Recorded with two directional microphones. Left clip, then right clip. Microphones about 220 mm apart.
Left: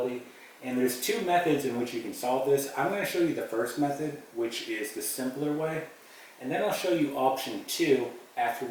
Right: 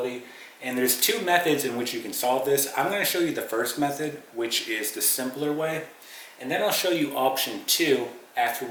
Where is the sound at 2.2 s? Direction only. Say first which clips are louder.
Right 3 dB; 20° left (ahead or behind).